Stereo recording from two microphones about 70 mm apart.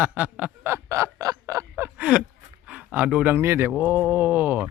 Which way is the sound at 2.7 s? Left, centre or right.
Centre.